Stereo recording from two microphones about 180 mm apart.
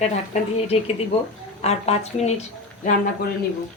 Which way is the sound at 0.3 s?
40° left (ahead or behind).